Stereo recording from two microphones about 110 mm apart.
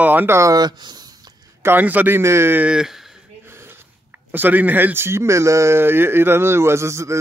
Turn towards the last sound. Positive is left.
turn(degrees=-25)  # may be behind; listen again after turning